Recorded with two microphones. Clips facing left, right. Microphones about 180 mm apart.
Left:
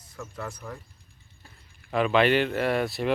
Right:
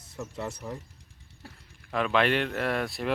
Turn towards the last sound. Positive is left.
turn(degrees=0)  # may be behind; listen again after turning